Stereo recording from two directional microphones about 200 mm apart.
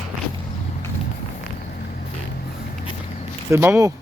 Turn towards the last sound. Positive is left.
turn(degrees=-10)  # may be behind; listen again after turning